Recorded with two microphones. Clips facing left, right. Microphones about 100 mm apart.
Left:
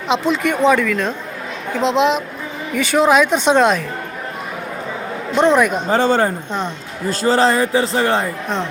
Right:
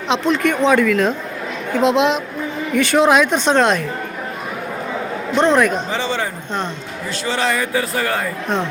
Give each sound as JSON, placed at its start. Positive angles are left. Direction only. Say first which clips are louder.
{"t": 0.1, "sound": "a woman's voice", "louder": "even", "side_deg": 5}
{"t": 5.4, "sound": "a man's voice", "louder": "left 1 dB", "side_deg": 10}
{"t": 5.9, "sound": "a man's voice", "louder": "left 7 dB", "side_deg": 45}